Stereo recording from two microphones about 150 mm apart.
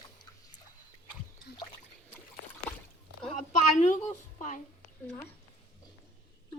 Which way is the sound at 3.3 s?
50° left (ahead or behind).